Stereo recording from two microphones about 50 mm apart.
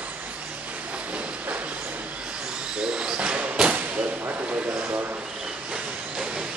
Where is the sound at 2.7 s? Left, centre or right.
Centre.